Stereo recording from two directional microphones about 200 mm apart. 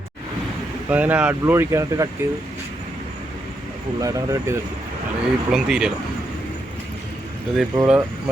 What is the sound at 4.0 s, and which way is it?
Speech, 15° right (ahead or behind).